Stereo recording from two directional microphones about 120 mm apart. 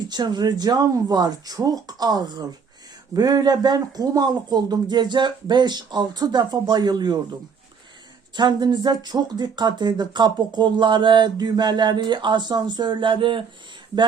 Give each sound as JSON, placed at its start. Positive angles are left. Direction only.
{"t": 0.1, "sound": "speech", "side_deg": -35}
{"t": 8.4, "sound": "speech", "side_deg": -35}